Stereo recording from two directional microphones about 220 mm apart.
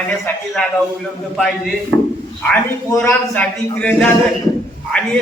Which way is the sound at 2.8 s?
10° left (ahead or behind).